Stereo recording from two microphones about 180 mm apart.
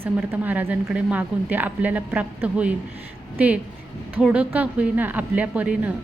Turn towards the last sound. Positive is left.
turn(degrees=-10)  # may be behind; listen again after turning